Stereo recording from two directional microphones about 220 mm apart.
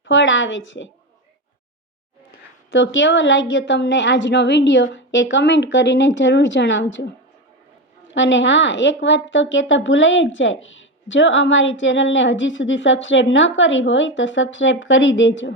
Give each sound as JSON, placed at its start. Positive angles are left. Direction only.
{"t": 0.0, "sound": "a woman's voice", "side_deg": 60}
{"t": 2.6, "sound": "a woman's voice", "side_deg": 60}
{"t": 8.1, "sound": "a woman's voice", "side_deg": 55}